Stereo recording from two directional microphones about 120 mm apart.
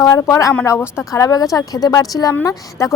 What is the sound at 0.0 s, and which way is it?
A woman's voice, 30° left (ahead or behind).